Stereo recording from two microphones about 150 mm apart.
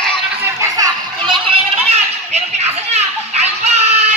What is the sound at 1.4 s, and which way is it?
Children playing, 45° right (ahead or behind).